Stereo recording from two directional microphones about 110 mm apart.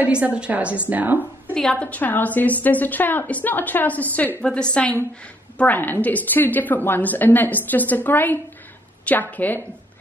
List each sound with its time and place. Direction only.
0.0 s a woman's voice: 10° right (ahead or behind)
1.5 s a woman's voice: 10° left (ahead or behind)